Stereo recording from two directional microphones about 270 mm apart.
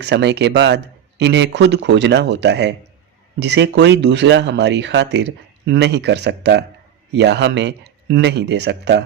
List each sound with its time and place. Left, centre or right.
0.0 s speech: right